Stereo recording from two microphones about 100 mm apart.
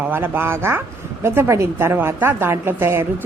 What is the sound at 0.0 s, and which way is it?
A woman's voice, 20° right (ahead or behind).